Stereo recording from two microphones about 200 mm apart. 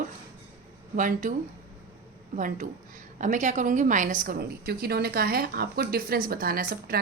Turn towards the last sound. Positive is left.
turn(degrees=-45)  # may be behind; listen again after turning